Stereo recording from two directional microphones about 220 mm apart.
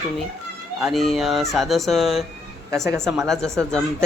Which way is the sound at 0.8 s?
Centre (ahead or behind).